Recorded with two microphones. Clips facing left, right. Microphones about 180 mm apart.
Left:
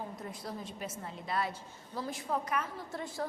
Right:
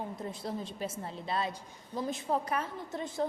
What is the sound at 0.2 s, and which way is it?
A woman's voice, 30° right (ahead or behind).